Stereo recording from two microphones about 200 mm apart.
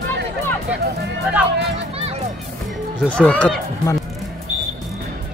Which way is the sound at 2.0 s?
30° right (ahead or behind).